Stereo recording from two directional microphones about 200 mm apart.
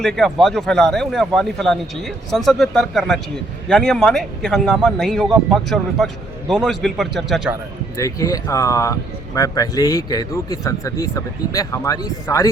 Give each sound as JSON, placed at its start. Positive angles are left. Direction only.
{"t": 0.0, "sound": "speech", "side_deg": 0}
{"t": 7.9, "sound": "speech", "side_deg": 15}